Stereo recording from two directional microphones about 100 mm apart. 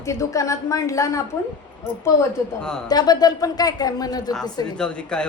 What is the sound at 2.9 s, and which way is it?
A woman's voice, 40° left (ahead or behind).